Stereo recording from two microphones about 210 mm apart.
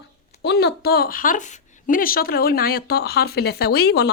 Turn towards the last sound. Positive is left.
turn(degrees=50)  # may be behind; listen again after turning